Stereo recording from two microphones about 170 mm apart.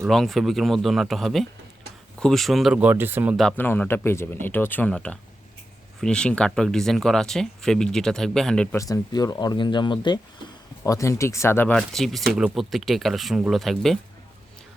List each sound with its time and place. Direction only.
0.0 s speech: centre (ahead or behind)
3.6 s speech: 10° left (ahead or behind)
8.8 s speech: 20° left (ahead or behind)
11.8 s speech: centre (ahead or behind)